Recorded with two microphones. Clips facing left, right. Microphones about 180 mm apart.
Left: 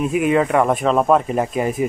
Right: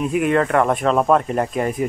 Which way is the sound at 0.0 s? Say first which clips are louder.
Left 1 dB; 5° left (ahead or behind).